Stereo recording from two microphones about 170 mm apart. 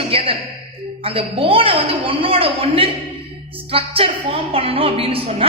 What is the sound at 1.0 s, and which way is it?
A man's voice, 30° right (ahead or behind).